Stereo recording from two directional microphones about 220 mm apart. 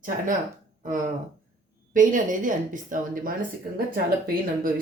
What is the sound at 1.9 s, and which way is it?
Speech, 35° right (ahead or behind).